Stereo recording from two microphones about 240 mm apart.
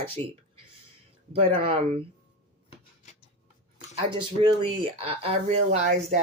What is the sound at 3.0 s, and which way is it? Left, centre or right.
Tick-tock, left.